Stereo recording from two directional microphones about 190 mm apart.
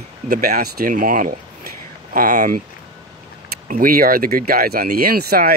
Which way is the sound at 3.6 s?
45° right (ahead or behind).